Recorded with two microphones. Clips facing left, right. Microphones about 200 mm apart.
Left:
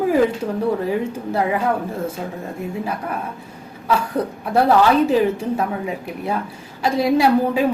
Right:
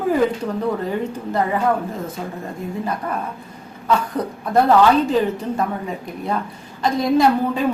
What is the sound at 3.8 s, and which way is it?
Speech, 10° left (ahead or behind).